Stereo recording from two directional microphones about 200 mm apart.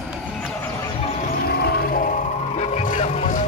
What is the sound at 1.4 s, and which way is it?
Music, 50° left (ahead or behind).